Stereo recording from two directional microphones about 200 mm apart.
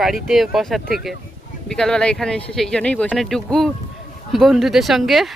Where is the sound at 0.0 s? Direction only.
Centre (ahead or behind).